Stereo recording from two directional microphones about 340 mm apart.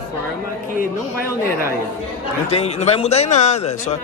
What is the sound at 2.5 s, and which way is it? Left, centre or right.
Speech, centre.